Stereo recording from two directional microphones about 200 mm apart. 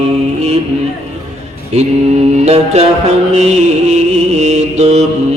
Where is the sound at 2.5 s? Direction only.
30° right (ahead or behind).